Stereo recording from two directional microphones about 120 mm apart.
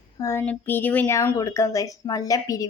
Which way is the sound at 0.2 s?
20° left (ahead or behind).